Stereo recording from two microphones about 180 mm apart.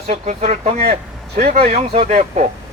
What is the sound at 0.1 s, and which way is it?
Speech, 35° right (ahead or behind).